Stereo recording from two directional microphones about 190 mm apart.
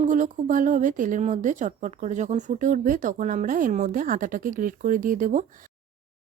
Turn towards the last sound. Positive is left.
turn(degrees=-45)  # may be behind; listen again after turning